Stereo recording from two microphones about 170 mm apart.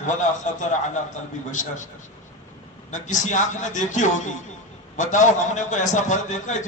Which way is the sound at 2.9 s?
45° left (ahead or behind).